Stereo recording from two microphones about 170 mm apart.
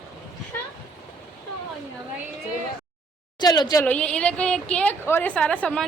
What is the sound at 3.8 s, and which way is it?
A woman's voice, 10° left (ahead or behind).